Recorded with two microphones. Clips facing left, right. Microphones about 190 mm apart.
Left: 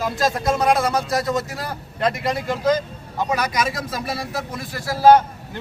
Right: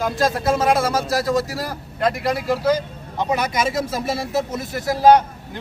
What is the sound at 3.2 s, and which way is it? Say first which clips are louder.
Speech: right 1 dB; 20° right (ahead or behind).